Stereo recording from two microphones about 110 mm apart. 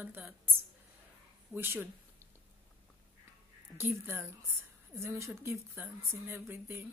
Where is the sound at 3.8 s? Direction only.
20° right (ahead or behind).